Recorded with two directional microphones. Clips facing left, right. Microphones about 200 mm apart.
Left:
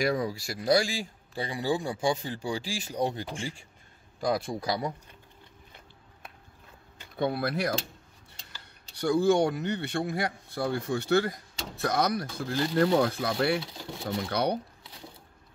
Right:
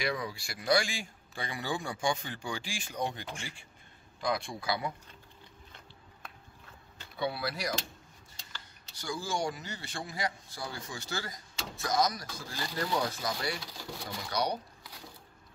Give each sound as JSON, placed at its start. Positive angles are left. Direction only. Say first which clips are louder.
{"t": 0.0, "sound": "a man's voice", "louder": "left 7 dB", "side_deg": 45}
{"t": 7.2, "sound": "speech", "louder": "left 6 dB", "side_deg": 50}
{"t": 8.9, "sound": "speech", "louder": "left 13 dB", "side_deg": 60}